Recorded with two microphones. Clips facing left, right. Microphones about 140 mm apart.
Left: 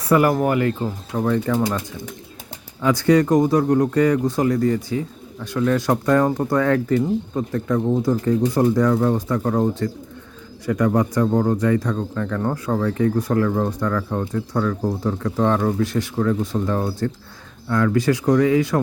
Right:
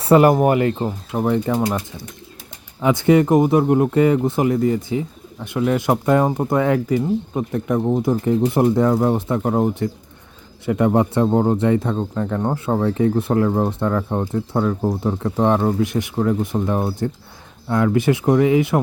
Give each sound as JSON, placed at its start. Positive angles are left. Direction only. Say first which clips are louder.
{"t": 0.0, "sound": "speech", "louder": "right 4 dB", "side_deg": -25}
{"t": 2.8, "sound": "speech", "louder": "right 1 dB", "side_deg": -20}
{"t": 6.7, "sound": "speech", "louder": "even", "side_deg": -10}